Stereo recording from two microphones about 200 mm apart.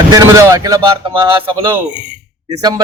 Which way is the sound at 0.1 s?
15° right (ahead or behind).